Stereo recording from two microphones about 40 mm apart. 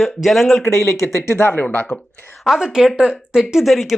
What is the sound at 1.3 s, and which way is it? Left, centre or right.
Speech, left.